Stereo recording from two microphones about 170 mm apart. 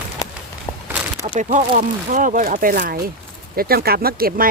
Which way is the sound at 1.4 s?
45° right (ahead or behind).